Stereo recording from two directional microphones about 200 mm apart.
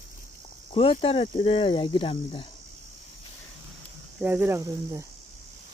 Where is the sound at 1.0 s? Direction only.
30° left (ahead or behind).